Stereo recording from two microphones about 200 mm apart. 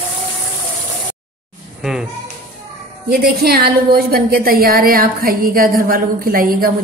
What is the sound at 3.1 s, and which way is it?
A woman's voice, 50° right (ahead or behind).